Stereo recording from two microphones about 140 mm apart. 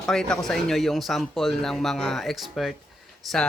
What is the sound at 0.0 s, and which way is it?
A man's voice, 5° left (ahead or behind).